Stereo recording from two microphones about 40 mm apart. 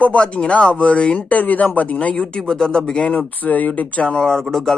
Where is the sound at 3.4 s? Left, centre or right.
Left.